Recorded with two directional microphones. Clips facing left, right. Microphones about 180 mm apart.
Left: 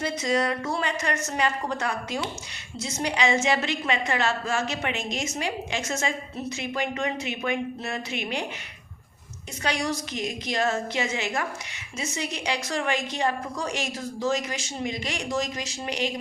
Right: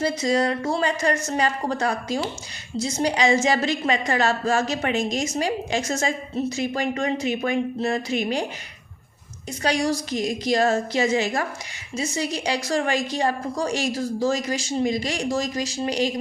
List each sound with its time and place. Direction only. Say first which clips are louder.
0.0 s a woman's voice: right 4 dB; 35° right (ahead or behind)
9.6 s a woman's voice: right 5 dB; 35° right (ahead or behind)